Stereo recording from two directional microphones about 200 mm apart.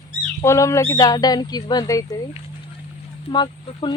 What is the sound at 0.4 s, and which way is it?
Speech, 15° left (ahead or behind).